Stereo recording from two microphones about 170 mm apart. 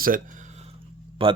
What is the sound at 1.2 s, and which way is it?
Speech, 30° right (ahead or behind).